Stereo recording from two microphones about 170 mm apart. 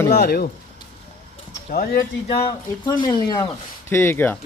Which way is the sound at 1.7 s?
60° left (ahead or behind).